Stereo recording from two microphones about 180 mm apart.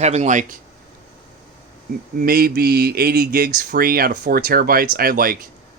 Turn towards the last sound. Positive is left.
turn(degrees=-55)  # may be behind; listen again after turning